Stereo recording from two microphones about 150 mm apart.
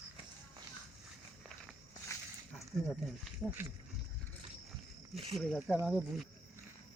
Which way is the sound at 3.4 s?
5° right (ahead or behind).